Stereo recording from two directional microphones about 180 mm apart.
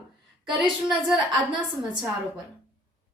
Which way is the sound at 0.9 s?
5° right (ahead or behind).